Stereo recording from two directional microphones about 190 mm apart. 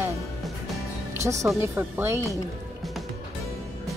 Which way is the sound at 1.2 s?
15° right (ahead or behind).